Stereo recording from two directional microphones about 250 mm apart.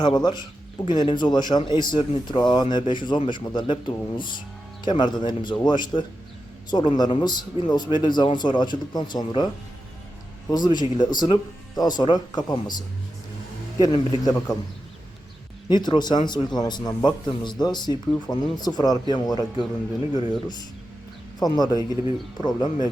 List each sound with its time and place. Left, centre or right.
0.0 s a man's voice: centre
10.5 s a man's voice: centre
13.7 s a man's voice: centre
15.7 s a man's voice: centre
21.3 s a man's voice: centre